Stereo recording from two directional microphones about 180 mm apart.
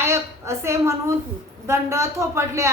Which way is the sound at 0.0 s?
15° right (ahead or behind).